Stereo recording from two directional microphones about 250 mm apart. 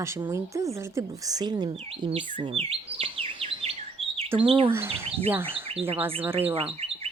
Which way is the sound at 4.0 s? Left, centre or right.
Right.